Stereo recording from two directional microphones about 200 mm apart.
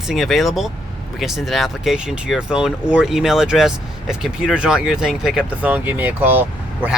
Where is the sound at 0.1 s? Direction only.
Centre (ahead or behind).